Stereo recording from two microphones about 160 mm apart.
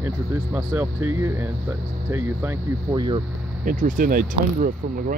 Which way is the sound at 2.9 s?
25° right (ahead or behind).